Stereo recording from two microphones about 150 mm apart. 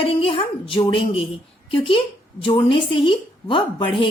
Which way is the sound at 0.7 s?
35° left (ahead or behind).